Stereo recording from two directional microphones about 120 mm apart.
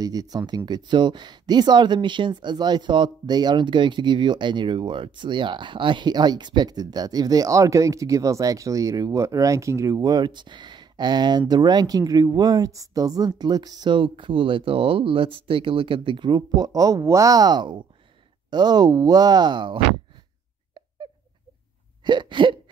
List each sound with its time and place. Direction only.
0.0 s speech: 30° right (ahead or behind)
22.0 s hiccup: 40° right (ahead or behind)